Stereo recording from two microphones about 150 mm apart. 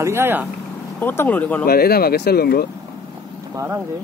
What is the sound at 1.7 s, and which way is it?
Speech, 90° left.